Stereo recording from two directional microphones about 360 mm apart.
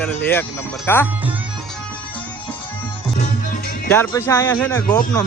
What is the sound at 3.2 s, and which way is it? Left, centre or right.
Music, left.